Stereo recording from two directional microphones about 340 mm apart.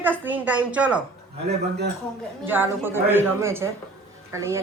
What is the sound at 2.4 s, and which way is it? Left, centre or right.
A woman's voice, centre.